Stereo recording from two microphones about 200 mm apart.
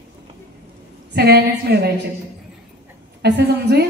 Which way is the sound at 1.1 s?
55° right (ahead or behind).